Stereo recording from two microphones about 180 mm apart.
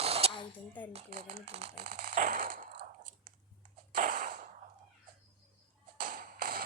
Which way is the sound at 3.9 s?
50° right (ahead or behind).